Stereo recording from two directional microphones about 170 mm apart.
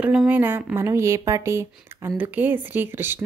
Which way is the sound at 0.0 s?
5° right (ahead or behind).